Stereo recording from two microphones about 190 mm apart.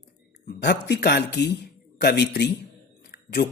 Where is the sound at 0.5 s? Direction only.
60° left (ahead or behind).